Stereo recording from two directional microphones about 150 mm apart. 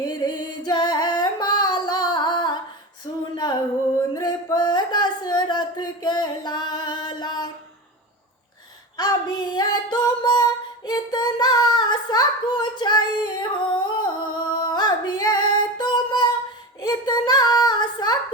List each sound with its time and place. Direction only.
0.0 s singing: 30° left (ahead or behind)
3.9 s a sound: 25° left (ahead or behind)
9.0 s female singing: 30° left (ahead or behind)
10.8 s child singing: 25° left (ahead or behind)